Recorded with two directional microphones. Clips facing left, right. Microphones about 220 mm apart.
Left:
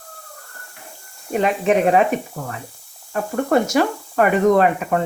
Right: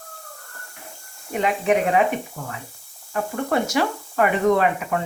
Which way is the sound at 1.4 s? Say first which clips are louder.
Left 3 dB; 40° left (ahead or behind).